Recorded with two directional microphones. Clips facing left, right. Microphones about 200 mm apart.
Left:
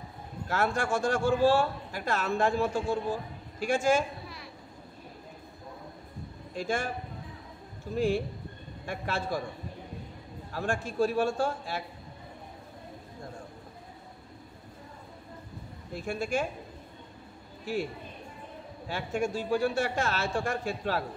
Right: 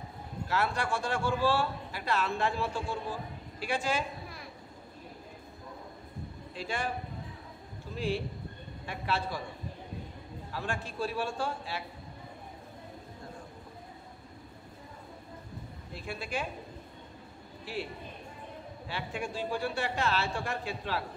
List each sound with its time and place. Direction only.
0.5 s a man's voice: 45° left (ahead or behind)
6.5 s a man's voice: 45° left (ahead or behind)
7.9 s a man's voice: 45° left (ahead or behind)
10.5 s a man's voice: 45° left (ahead or behind)
15.9 s a man's voice: 45° left (ahead or behind)
17.7 s a man's voice: 45° left (ahead or behind)
18.9 s a man's voice: 45° left (ahead or behind)